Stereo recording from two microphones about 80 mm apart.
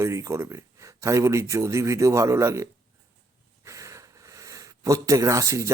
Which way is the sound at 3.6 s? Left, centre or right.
Right.